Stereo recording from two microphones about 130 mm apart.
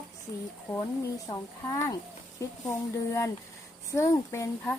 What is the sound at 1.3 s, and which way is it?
Speech, 50° left (ahead or behind).